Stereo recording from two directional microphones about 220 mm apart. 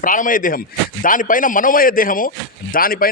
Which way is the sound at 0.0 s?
40° left (ahead or behind).